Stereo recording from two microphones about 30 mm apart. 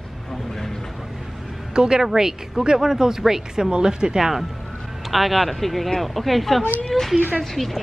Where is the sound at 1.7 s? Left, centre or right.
Right.